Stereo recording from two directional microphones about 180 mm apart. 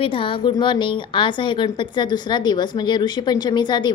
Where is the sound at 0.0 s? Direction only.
30° left (ahead or behind).